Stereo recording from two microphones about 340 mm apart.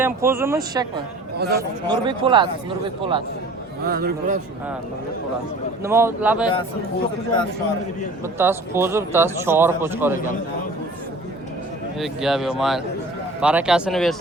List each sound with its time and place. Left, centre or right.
0.0 s speech: centre
1.4 s a man's voice: right
1.9 s speech: centre
3.8 s a man's voice: right
5.8 s speech: centre
8.2 s speech: centre
11.9 s speech: centre